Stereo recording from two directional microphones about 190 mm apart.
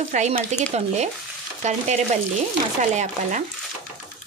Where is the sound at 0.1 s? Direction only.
40° right (ahead or behind).